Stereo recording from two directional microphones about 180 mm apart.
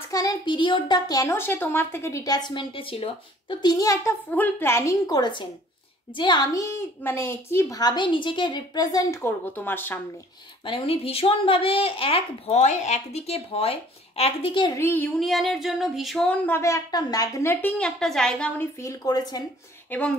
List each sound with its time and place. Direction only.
0.1 s a child's voice: 20° left (ahead or behind)
4.3 s female singing: 10° left (ahead or behind)
6.1 s a child's voice: 25° left (ahead or behind)
10.6 s a woman's voice: 30° left (ahead or behind)
14.8 s female singing: 10° left (ahead or behind)
19.9 s female singing: 10° left (ahead or behind)